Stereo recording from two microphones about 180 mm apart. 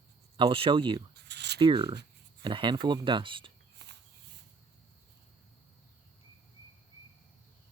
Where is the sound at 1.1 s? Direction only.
70° right (ahead or behind).